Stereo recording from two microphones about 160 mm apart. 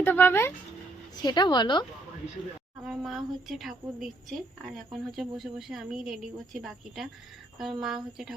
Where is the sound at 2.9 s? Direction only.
Centre (ahead or behind).